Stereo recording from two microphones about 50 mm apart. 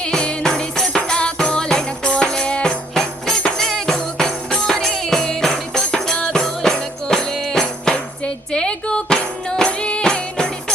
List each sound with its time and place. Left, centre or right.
0.0 s music: centre